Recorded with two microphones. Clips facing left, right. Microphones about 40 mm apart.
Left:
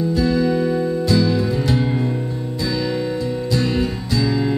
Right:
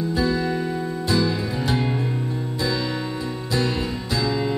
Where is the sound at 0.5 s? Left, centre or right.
Centre.